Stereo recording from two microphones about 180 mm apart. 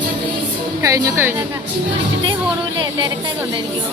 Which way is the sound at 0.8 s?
20° right (ahead or behind).